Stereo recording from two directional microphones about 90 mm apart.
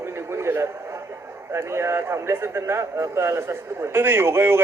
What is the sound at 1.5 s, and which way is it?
Speech, 30° right (ahead or behind).